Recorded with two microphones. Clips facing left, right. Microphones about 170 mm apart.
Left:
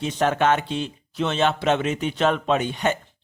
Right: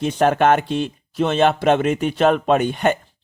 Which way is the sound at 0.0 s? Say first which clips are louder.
Right 5 dB; 50° right (ahead or behind).